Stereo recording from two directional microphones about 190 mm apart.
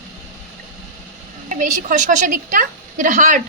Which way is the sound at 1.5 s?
45° right (ahead or behind).